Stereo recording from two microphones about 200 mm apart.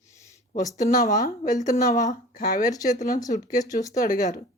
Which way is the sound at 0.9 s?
45° left (ahead or behind).